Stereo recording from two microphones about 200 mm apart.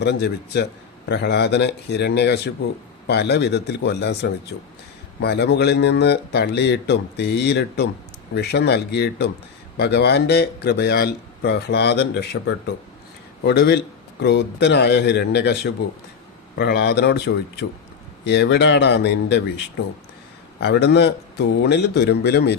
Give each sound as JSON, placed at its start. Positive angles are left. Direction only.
{"t": 0.0, "sound": "a man's voice", "side_deg": 55}
{"t": 20.6, "sound": "a man's voice", "side_deg": 55}